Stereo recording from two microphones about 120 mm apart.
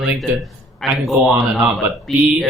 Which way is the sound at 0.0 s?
5° right (ahead or behind).